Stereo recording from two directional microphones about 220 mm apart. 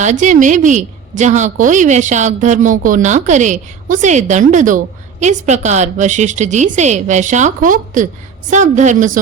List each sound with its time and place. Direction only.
0.0 s a woman's voice: 35° right (ahead or behind)